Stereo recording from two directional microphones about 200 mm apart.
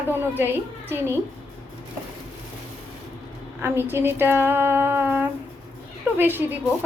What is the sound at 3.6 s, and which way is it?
A woman's voice, 10° right (ahead or behind).